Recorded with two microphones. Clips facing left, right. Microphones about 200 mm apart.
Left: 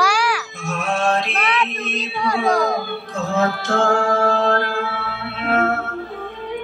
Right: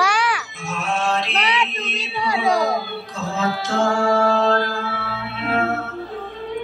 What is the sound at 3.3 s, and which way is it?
Music, 55° left (ahead or behind).